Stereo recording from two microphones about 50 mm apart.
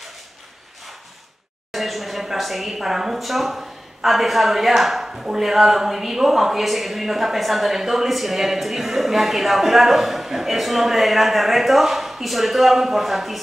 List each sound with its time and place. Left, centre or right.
1.7 s a woman's voice: centre